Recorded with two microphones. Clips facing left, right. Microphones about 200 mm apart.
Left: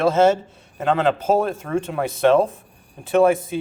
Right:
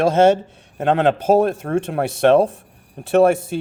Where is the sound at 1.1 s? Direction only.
70° right (ahead or behind).